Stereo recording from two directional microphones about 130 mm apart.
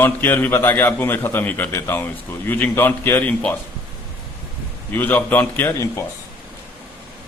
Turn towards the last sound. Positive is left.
turn(degrees=20)  # may be behind; listen again after turning